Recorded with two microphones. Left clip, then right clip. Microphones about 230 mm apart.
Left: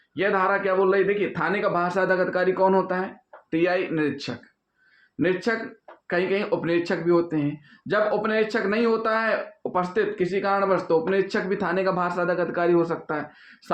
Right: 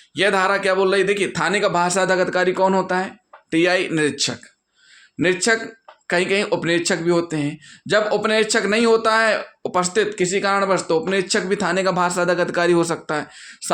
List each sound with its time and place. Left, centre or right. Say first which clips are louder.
0.1 s speech: right 4 dB; right